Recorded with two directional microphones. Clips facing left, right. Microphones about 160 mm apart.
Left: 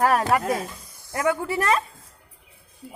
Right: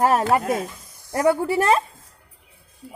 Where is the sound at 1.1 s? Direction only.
35° right (ahead or behind).